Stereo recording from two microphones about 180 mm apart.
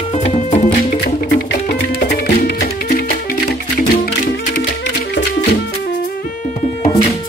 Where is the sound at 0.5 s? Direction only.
45° left (ahead or behind).